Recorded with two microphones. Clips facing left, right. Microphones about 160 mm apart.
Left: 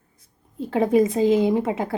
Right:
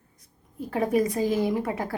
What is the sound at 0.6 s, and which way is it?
Speech, 25° left (ahead or behind).